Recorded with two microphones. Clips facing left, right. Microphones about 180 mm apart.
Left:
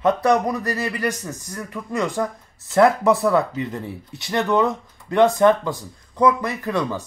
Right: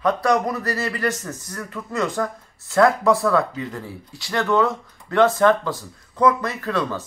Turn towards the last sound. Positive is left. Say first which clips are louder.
# left 1 dB
turn(degrees=15)  # may be behind; listen again after turning